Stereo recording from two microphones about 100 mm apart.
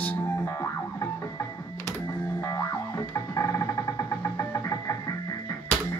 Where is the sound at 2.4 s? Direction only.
35° left (ahead or behind).